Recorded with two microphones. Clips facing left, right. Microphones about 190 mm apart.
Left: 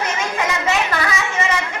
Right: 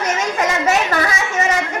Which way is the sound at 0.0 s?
40° right (ahead or behind).